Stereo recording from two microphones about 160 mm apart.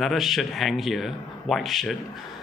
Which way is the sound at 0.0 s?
Centre (ahead or behind).